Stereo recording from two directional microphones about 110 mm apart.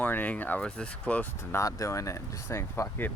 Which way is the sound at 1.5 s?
30° left (ahead or behind).